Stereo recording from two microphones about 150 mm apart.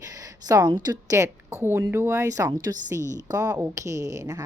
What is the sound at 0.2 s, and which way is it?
A woman's voice, 25° right (ahead or behind).